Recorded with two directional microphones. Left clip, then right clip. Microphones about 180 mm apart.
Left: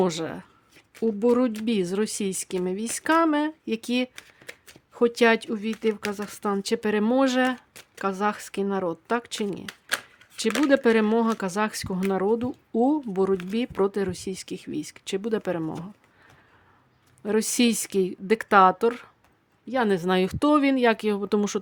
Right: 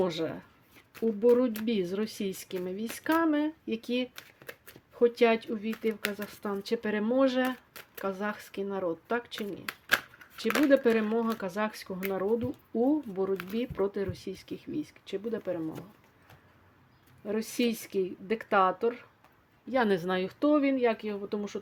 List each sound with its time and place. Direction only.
0.0 s speech: 30° left (ahead or behind)
4.4 s shuffling cards: 5° right (ahead or behind)
4.9 s speech: 40° left (ahead or behind)
10.7 s speech: 40° left (ahead or behind)
17.2 s speech: 45° left (ahead or behind)
19.6 s speech: 20° left (ahead or behind)
20.1 s speech: 45° left (ahead or behind)